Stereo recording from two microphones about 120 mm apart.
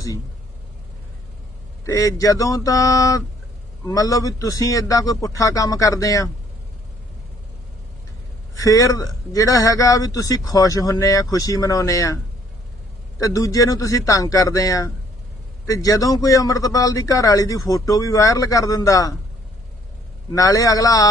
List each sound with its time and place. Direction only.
1.9 s speech: 30° left (ahead or behind)
8.5 s speech: 30° left (ahead or behind)
13.2 s speech: 30° left (ahead or behind)
20.3 s speech: 30° left (ahead or behind)